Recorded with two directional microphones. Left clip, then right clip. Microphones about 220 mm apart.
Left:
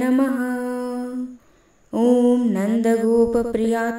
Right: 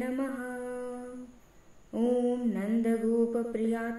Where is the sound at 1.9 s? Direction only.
45° left (ahead or behind).